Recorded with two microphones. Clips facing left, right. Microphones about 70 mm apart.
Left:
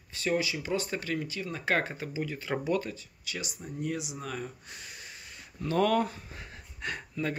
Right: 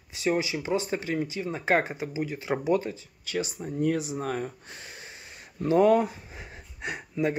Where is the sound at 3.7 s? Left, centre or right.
Right.